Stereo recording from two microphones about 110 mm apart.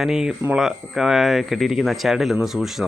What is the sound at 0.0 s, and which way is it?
Speech, 5° right (ahead or behind).